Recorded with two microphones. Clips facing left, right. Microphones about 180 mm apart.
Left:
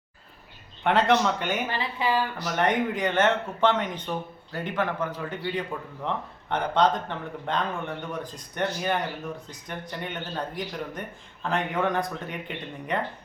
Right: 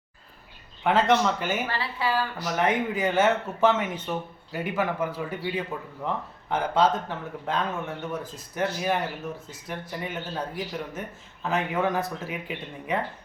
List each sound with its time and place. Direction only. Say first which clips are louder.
0.9 s speech: even; centre (ahead or behind)
1.6 s speech: left 1 dB; 20° left (ahead or behind)
2.6 s speech: even; 5° right (ahead or behind)